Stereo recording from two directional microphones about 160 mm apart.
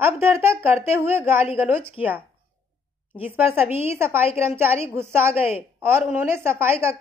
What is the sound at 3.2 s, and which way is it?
A woman's voice, 10° right (ahead or behind).